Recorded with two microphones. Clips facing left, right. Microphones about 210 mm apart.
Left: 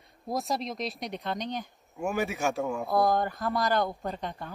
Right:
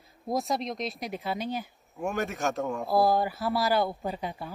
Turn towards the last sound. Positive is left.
turn(degrees=-5)  # may be behind; listen again after turning